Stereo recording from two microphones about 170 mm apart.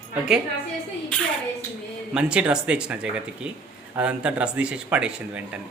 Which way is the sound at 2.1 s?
5° right (ahead or behind).